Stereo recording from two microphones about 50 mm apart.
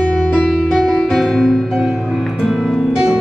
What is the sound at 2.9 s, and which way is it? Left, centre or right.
Music, centre.